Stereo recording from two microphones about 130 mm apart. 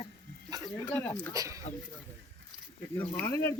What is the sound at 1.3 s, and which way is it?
Speech, 25° right (ahead or behind).